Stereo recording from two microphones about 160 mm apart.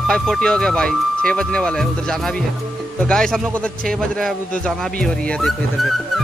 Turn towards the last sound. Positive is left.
turn(degrees=0)  # may be behind; listen again after turning